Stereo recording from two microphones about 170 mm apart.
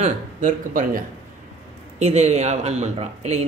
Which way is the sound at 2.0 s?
40° right (ahead or behind).